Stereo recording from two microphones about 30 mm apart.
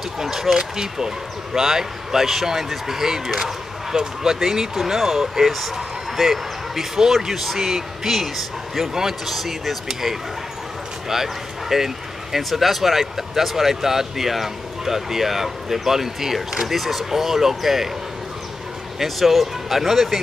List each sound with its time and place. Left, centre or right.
0.6 s speech: centre
11.7 s speech: centre
19.0 s speech: centre